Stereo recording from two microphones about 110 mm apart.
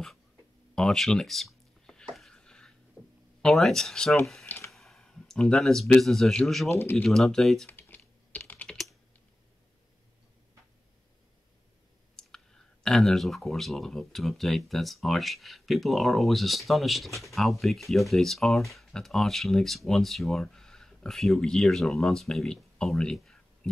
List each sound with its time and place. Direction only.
0.7 s a sound: 5° left (ahead or behind)
3.4 s speech: centre (ahead or behind)
6.7 s speech: 20° left (ahead or behind)
7.0 s speech: 5° left (ahead or behind)
7.7 s typing: 15° left (ahead or behind)
12.2 s clicking: 5° left (ahead or behind)
12.8 s speech: 5° left (ahead or behind)